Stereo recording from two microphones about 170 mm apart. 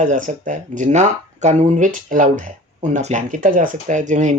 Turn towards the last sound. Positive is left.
turn(degrees=-45)  # may be behind; listen again after turning